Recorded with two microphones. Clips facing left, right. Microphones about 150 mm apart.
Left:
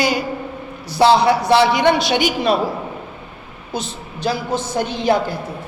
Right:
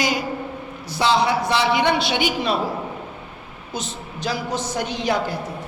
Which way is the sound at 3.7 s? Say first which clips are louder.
Left 3 dB; 30° left (ahead or behind).